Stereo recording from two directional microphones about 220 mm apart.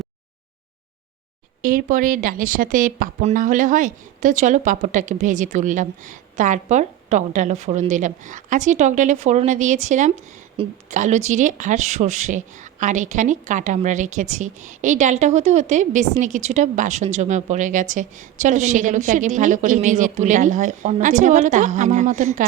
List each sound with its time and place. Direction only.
1.6 s a woman's voice: 40° right (ahead or behind)